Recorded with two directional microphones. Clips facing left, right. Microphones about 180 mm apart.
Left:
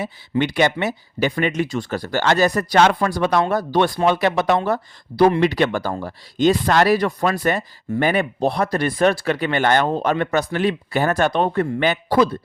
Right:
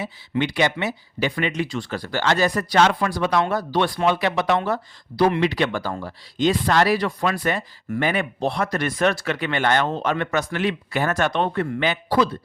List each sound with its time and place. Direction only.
0.0 s speech: 50° left (ahead or behind)